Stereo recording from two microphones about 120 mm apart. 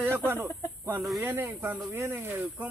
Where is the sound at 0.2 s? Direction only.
20° right (ahead or behind).